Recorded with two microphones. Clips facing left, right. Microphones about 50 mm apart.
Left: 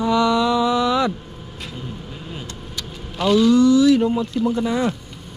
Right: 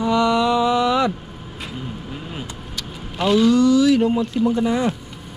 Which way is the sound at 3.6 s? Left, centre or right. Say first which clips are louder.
Left 1 dB; right.